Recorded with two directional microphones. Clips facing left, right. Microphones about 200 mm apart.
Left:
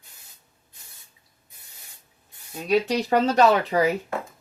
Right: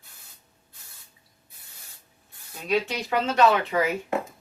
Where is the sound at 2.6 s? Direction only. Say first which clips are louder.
Left 4 dB; 40° left (ahead or behind).